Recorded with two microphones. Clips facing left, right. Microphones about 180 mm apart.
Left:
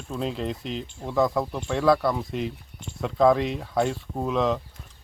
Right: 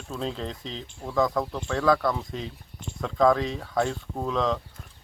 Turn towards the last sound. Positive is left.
turn(degrees=5)  # may be behind; listen again after turning